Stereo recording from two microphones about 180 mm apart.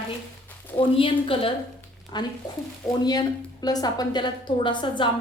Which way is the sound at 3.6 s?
20° left (ahead or behind).